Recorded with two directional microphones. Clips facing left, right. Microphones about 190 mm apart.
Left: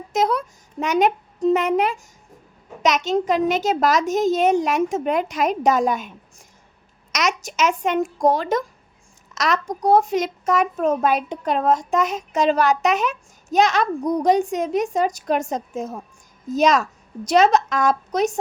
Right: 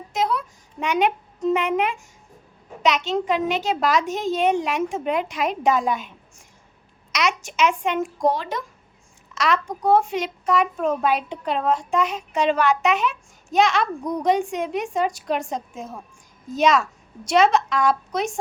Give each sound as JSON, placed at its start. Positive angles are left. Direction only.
{"t": 0.1, "sound": "a woman's voice", "side_deg": 45}